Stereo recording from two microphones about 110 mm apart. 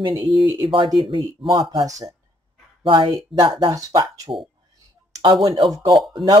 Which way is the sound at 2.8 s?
45° right (ahead or behind).